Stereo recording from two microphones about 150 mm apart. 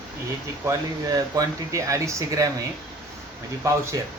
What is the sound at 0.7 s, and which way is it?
Speech, 20° right (ahead or behind).